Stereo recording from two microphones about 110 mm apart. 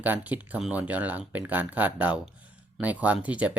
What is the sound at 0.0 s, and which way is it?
Speech, 15° right (ahead or behind).